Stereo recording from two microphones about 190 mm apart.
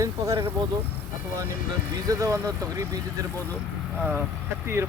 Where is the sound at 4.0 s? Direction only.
10° right (ahead or behind).